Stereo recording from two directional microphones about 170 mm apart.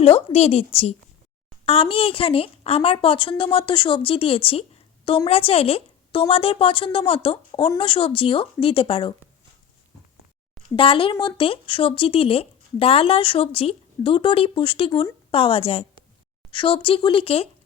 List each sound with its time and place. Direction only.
0.0 s speech: 35° left (ahead or behind)
10.8 s speech: 30° left (ahead or behind)